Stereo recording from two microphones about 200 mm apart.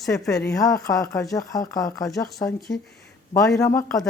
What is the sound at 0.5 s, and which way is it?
Speech, 15° left (ahead or behind).